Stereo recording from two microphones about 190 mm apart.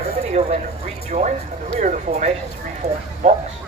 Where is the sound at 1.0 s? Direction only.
35° right (ahead or behind).